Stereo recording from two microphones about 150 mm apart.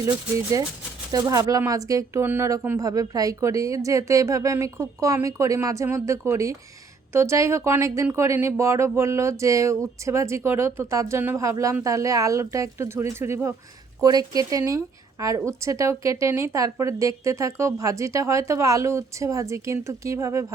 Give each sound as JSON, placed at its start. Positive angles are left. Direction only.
{"t": 0.0, "sound": "a woman's voice", "side_deg": -20}